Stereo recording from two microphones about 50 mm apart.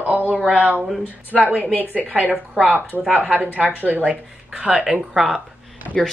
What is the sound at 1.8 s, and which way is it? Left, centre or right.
Speech, right.